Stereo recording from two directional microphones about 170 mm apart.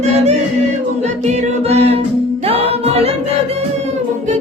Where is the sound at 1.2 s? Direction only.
40° right (ahead or behind).